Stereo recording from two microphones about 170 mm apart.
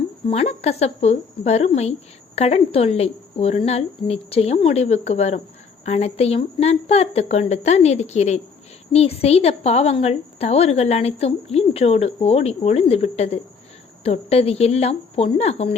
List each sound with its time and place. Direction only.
0.3 s a woman's voice: 40° left (ahead or behind)